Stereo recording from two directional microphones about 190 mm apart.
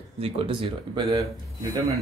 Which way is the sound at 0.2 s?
30° right (ahead or behind).